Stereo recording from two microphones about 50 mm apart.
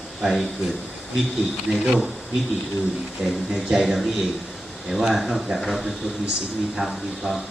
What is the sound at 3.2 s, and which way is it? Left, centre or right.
Speech, centre.